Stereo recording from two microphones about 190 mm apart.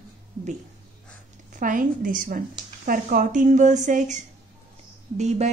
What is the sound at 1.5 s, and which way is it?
Speech, 45° right (ahead or behind).